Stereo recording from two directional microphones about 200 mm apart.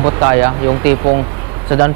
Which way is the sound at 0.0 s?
20° right (ahead or behind).